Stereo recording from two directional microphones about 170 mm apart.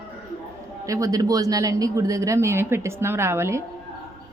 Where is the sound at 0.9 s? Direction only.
20° right (ahead or behind).